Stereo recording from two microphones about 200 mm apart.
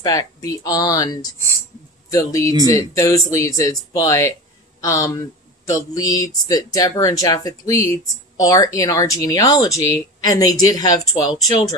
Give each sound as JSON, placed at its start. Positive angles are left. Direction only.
{"t": 0.0, "sound": "speech", "side_deg": 15}